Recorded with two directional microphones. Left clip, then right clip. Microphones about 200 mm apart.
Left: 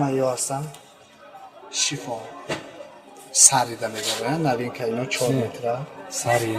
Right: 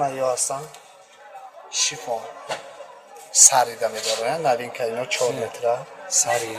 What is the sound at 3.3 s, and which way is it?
Speech, 50° right (ahead or behind).